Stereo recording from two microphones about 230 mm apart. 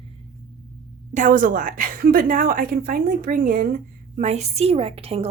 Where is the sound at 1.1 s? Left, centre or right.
Right.